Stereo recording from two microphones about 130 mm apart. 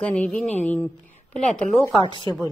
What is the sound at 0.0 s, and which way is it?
Speech, 10° left (ahead or behind).